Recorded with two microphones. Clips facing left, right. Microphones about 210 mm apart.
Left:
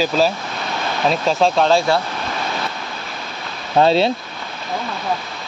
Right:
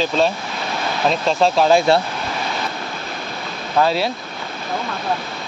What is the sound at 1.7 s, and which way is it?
Speech, 25° right (ahead or behind).